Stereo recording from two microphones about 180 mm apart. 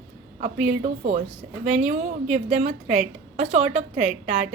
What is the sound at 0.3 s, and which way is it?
A woman's voice, 40° right (ahead or behind).